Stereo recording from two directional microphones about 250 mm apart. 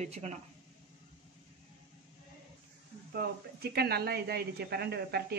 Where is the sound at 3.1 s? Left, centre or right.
Right.